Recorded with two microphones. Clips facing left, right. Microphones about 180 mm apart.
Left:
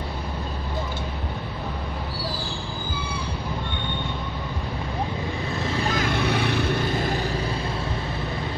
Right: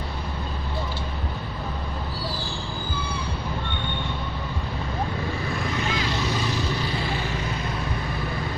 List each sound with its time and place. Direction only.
5.6 s vehicle: 30° left (ahead or behind)
5.9 s vehicle: 50° left (ahead or behind)